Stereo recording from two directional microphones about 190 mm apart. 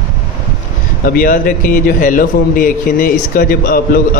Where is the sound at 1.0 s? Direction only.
50° left (ahead or behind).